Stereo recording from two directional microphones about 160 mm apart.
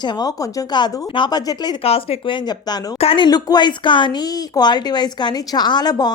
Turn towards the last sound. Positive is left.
turn(degrees=25)  # may be behind; listen again after turning